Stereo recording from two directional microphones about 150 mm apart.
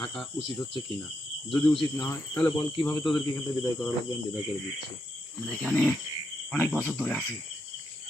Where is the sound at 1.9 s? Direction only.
20° left (ahead or behind).